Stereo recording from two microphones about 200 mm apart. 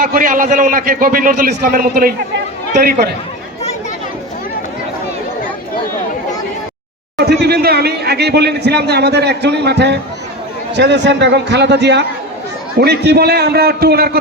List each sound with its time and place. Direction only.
0.0 s a man's voice: 45° right (ahead or behind)
7.2 s a man's voice: 50° right (ahead or behind)